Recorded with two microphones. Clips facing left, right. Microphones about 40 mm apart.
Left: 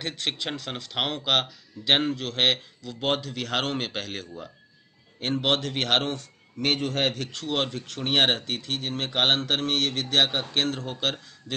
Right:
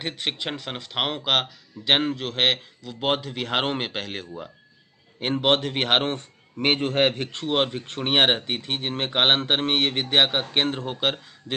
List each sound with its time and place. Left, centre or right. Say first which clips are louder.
0.0 s a man's voice: right 1 dB; centre